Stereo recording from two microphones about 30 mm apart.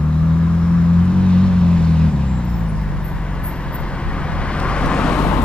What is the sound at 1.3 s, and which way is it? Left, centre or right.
Vehicle, left.